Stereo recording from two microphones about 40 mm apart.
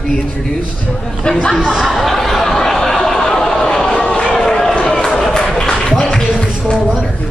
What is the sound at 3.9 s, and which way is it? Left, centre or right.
Run, left.